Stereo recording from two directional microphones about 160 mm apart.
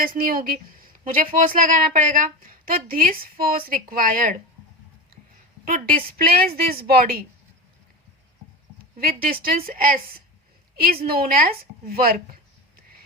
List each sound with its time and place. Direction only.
0.0 s a woman's voice: 65° right (ahead or behind)
5.6 s a woman's voice: 65° right (ahead or behind)
9.0 s a woman's voice: 70° right (ahead or behind)